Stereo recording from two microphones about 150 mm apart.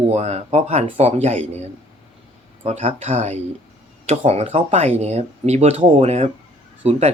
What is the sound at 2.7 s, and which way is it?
Speech, 45° right (ahead or behind).